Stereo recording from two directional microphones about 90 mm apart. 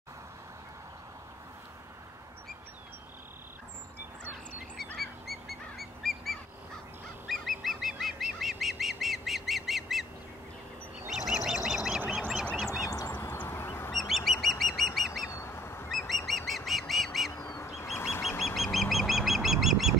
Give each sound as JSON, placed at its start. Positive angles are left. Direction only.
{"t": 4.9, "sound": "goose", "side_deg": 0}
{"t": 11.1, "sound": "duck", "side_deg": -5}
{"t": 12.8, "sound": "a sound", "side_deg": 40}
{"t": 13.1, "sound": "a sound", "side_deg": 30}
{"t": 13.4, "sound": "duck", "side_deg": 25}
{"t": 13.9, "sound": "goose", "side_deg": 0}
{"t": 15.2, "sound": "goose", "side_deg": 30}
{"t": 15.9, "sound": "bird", "side_deg": 0}
{"t": 17.6, "sound": "bird", "side_deg": 30}
{"t": 18.4, "sound": "bird", "side_deg": 0}